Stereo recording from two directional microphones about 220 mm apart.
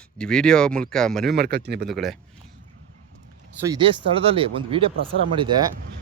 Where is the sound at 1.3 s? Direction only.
45° right (ahead or behind).